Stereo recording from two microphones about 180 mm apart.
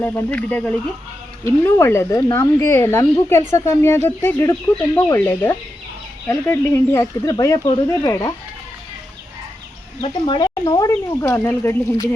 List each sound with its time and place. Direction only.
0.0 s speech: 10° left (ahead or behind)
10.0 s speech: 25° left (ahead or behind)